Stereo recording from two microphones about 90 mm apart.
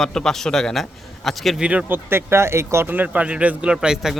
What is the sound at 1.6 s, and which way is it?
Speech, 15° right (ahead or behind).